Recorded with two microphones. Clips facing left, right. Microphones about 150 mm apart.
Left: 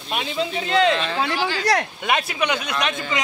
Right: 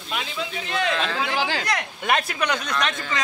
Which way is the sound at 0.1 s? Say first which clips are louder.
Left 5 dB; 25° left (ahead or behind).